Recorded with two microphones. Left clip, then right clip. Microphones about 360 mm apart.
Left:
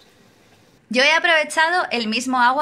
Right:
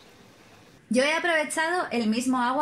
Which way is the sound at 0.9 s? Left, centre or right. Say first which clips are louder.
Left 8 dB; left.